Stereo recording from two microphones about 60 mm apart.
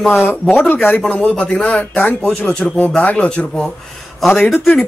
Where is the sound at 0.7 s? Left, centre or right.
Left.